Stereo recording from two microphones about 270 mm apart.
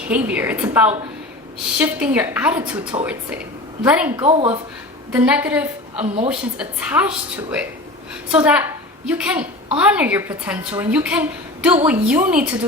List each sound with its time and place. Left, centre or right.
0.1 s a woman's voice: centre
4.3 s speech: right
5.1 s a woman's voice: centre
8.3 s a woman's voice: centre